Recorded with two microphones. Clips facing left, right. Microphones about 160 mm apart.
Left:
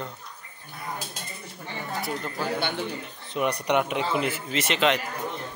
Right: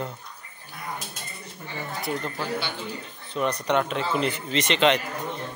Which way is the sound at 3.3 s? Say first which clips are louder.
Even; 15° left (ahead or behind).